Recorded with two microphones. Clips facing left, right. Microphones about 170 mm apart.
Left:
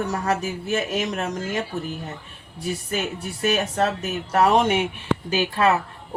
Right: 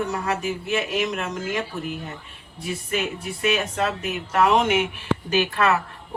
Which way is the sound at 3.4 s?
40° left (ahead or behind).